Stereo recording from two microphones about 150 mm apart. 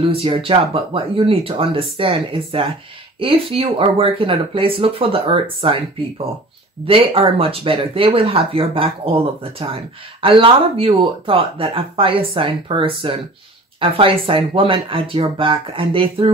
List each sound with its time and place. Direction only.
0.1 s speech: 35° right (ahead or behind)